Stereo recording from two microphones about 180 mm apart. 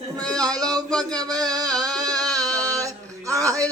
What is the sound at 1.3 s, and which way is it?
Music, 20° right (ahead or behind).